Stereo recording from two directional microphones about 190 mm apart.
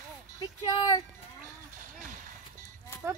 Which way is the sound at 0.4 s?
25° left (ahead or behind).